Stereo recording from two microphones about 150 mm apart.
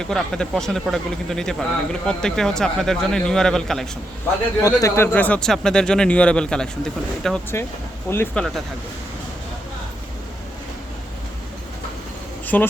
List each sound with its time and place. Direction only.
0.0 s a man's voice: 5° left (ahead or behind)
4.6 s a man's voice: 20° left (ahead or behind)
5.1 s a man's voice: 10° left (ahead or behind)
8.1 s speech: 15° left (ahead or behind)
12.5 s speech: 10° left (ahead or behind)